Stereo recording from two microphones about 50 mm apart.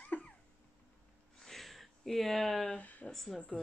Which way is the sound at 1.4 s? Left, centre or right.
Centre.